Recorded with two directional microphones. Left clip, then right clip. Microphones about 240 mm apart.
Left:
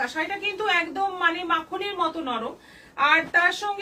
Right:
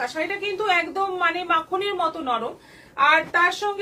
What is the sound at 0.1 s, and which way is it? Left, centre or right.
A woman's voice, centre.